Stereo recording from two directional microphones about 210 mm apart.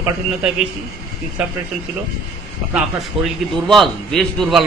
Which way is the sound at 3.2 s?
25° right (ahead or behind).